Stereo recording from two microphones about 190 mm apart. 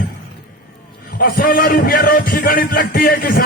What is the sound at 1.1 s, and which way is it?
A man's voice, 50° left (ahead or behind).